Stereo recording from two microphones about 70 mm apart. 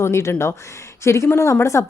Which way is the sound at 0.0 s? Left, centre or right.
Left.